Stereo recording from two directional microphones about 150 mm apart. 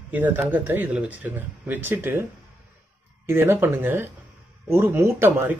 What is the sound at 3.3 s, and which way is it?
Speech, 15° right (ahead or behind).